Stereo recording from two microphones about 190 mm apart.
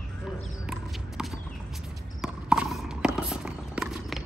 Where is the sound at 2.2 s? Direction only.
5° right (ahead or behind).